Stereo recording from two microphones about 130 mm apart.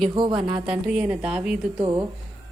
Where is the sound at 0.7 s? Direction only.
5° right (ahead or behind).